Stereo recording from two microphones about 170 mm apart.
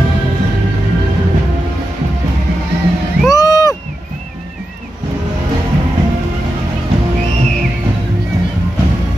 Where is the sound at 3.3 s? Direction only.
20° left (ahead or behind).